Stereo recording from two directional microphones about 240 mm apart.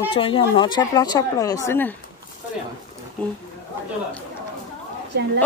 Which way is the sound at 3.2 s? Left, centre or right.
Centre.